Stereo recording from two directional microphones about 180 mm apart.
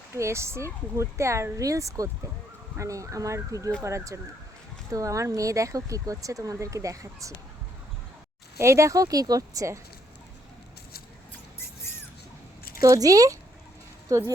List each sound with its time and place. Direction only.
0.2 s speech: 15° right (ahead or behind)
8.5 s speech: 15° right (ahead or behind)
12.8 s speech: 20° right (ahead or behind)